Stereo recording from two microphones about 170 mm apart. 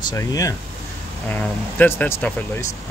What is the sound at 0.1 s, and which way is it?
Speech, 20° left (ahead or behind).